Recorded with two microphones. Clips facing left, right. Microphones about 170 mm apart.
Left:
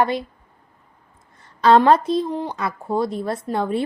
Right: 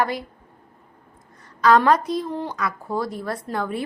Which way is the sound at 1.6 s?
30° left (ahead or behind).